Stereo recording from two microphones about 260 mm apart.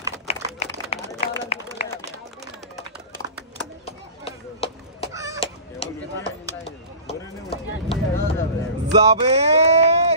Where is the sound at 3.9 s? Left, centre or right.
Left.